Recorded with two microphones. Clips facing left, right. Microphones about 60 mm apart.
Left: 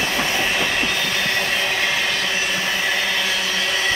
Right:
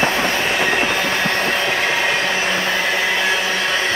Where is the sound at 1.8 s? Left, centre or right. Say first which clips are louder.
Right 3 dB; right.